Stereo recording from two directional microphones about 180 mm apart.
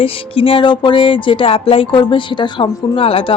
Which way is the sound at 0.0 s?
30° left (ahead or behind).